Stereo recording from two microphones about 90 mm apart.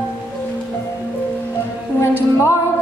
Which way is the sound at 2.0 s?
30° left (ahead or behind).